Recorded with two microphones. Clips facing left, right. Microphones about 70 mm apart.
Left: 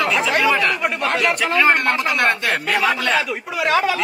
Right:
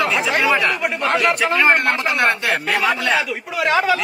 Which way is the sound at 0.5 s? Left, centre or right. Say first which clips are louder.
Even; centre.